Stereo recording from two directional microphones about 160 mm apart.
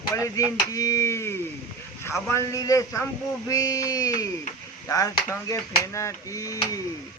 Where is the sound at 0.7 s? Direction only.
20° left (ahead or behind).